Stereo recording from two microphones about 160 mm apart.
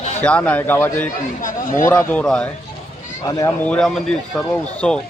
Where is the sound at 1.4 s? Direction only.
55° left (ahead or behind).